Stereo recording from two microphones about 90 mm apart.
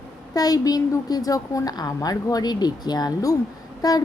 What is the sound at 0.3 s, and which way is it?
A woman's voice, 45° left (ahead or behind).